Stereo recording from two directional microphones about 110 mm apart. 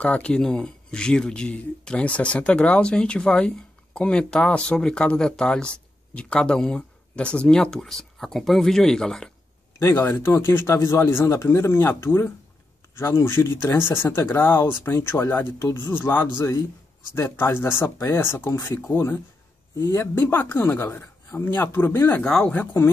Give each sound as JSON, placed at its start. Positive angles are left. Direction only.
{"t": 0.0, "sound": "speech", "side_deg": 10}
{"t": 9.8, "sound": "speech", "side_deg": 25}
{"t": 22.2, "sound": "speech", "side_deg": 5}